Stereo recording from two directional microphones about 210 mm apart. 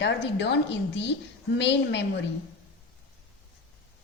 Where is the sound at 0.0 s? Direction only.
55° left (ahead or behind).